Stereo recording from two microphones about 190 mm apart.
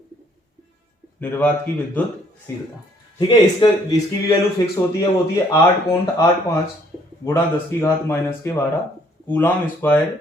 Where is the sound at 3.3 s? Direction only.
25° left (ahead or behind).